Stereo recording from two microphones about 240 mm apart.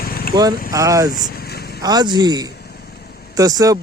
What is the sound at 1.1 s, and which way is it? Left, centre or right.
Vehicle, left.